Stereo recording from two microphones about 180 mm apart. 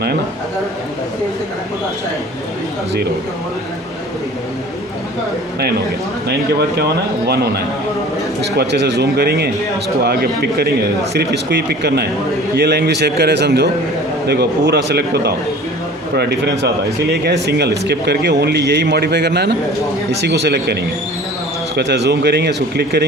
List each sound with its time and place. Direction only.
6.7 s speech: 65° right (ahead or behind)
8.4 s a man's voice: 70° right (ahead or behind)
17.0 s a man's voice: 65° right (ahead or behind)
21.8 s speech: 70° right (ahead or behind)